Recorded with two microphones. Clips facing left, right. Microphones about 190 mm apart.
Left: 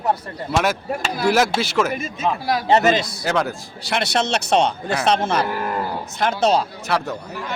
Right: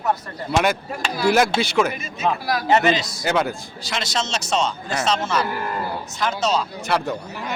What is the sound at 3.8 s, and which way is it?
Speech, 65° left (ahead or behind).